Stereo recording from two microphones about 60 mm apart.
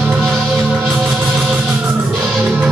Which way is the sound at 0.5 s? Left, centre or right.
Centre.